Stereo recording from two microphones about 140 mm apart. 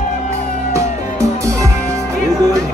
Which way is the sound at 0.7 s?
20° right (ahead or behind).